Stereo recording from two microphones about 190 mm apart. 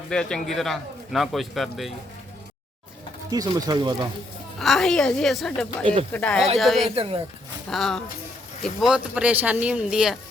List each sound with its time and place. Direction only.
0.1 s speech: 5° left (ahead or behind)
3.2 s speech: 20° right (ahead or behind)
4.6 s speech: centre (ahead or behind)
5.8 s speech: 25° right (ahead or behind)
6.1 s speech: 5° left (ahead or behind)
6.9 s speech: 30° right (ahead or behind)
7.7 s speech: centre (ahead or behind)